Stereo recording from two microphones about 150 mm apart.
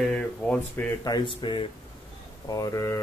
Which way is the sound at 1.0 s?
30° left (ahead or behind).